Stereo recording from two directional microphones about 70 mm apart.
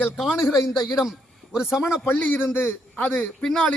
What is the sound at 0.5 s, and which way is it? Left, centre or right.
Speech, left.